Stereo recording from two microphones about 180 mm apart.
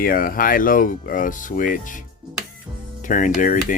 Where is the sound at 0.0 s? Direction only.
55° left (ahead or behind).